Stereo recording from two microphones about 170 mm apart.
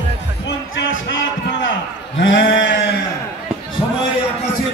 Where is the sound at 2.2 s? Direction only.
90° left.